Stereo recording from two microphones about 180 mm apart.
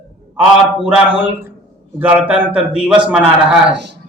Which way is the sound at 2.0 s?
10° right (ahead or behind).